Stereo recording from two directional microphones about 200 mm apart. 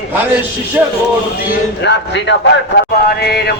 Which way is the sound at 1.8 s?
60° left (ahead or behind).